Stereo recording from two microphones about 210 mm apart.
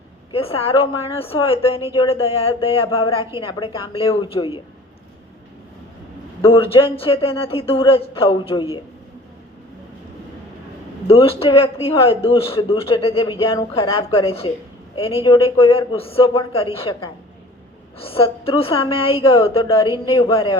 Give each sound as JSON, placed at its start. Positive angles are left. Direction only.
{"t": 0.3, "sound": "a woman's voice", "side_deg": 25}
{"t": 6.4, "sound": "a woman's voice", "side_deg": 25}
{"t": 11.1, "sound": "a woman's voice", "side_deg": 25}